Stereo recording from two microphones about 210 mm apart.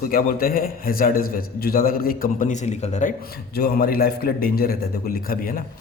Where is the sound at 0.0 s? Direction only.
45° left (ahead or behind).